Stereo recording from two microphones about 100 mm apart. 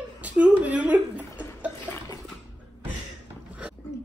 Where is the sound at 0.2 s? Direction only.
15° right (ahead or behind).